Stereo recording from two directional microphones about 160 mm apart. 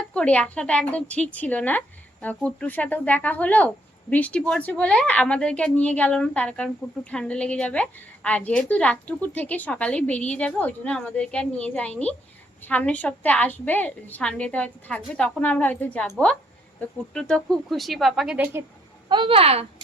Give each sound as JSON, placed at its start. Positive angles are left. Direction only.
{"t": 0.1, "sound": "a woman's voice", "side_deg": 10}
{"t": 19.0, "sound": "speech", "side_deg": -30}